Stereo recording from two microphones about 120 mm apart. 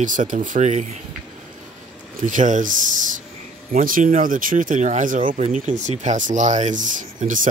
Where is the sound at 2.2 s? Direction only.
90° right.